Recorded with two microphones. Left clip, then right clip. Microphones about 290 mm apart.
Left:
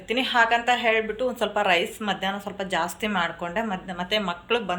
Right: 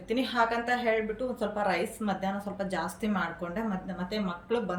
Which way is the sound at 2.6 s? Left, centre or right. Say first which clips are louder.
Left 7 dB; centre.